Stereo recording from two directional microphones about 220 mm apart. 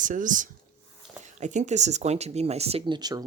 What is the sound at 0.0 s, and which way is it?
Speech, 35° right (ahead or behind).